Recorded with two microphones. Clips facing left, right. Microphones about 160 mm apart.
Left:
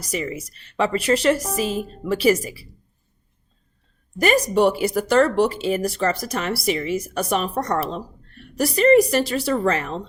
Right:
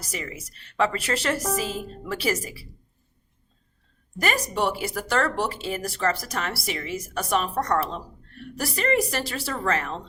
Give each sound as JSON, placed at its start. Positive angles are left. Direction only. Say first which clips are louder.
{"t": 0.1, "sound": "speech", "louder": "left 9 dB", "side_deg": 15}
{"t": 4.2, "sound": "speech", "louder": "left 8 dB", "side_deg": 15}